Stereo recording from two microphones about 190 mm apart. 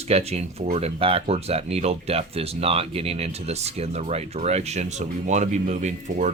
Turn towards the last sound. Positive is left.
turn(degrees=-40)  # may be behind; listen again after turning